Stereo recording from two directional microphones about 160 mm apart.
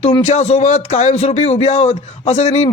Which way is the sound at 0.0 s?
45° left (ahead or behind).